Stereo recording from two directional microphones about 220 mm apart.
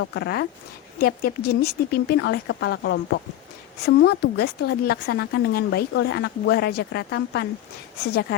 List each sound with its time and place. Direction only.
0.0 s a woman's voice: 50° left (ahead or behind)